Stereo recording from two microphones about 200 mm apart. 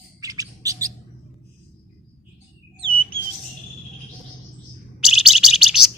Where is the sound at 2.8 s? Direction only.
25° right (ahead or behind).